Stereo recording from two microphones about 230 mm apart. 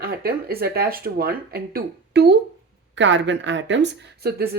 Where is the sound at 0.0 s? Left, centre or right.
Right.